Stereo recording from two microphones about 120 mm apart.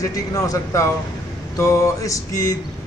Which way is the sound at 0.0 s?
30° left (ahead or behind).